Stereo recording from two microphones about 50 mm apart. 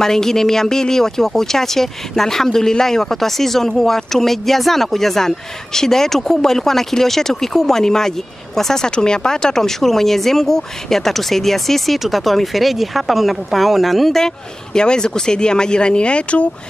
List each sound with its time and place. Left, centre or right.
0.0 s speech: centre